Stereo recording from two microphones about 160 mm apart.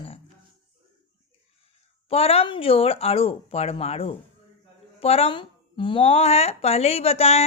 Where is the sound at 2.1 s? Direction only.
40° left (ahead or behind).